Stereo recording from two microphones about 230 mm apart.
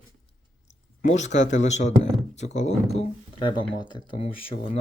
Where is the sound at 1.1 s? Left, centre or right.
Left.